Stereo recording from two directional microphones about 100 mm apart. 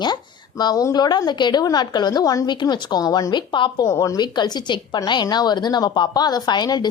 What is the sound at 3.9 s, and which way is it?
Speech, 35° left (ahead or behind).